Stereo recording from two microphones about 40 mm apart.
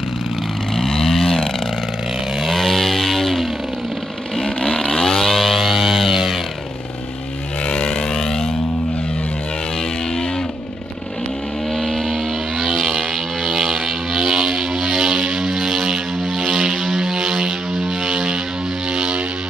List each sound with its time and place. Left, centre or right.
0.7 s vehicle: centre
7.6 s vehicle: left
8.2 s a sound: centre
11.7 s vehicle: centre
12.8 s music: centre
14.3 s vehicle: centre
15.3 s music: centre
16.4 s vehicle: centre
18.0 s music: centre